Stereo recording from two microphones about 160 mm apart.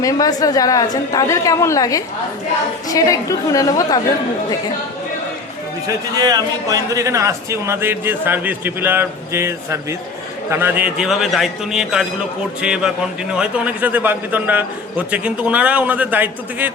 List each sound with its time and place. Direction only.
0.0 s a woman's voice: 20° left (ahead or behind)
6.1 s a man's voice: 25° right (ahead or behind)